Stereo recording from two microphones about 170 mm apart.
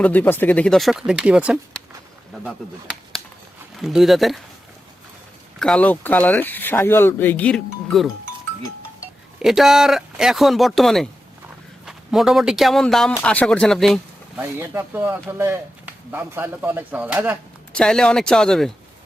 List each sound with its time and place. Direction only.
0.0 s speech: 10° left (ahead or behind)
5.5 s speech: 5° left (ahead or behind)
9.4 s speech: centre (ahead or behind)
14.4 s speech: 15° right (ahead or behind)
17.7 s speech: 5° left (ahead or behind)